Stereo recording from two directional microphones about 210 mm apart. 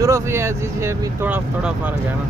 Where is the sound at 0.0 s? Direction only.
15° right (ahead or behind).